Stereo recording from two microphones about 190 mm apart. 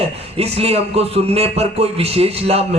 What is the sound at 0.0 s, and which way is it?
A man's voice, 30° right (ahead or behind).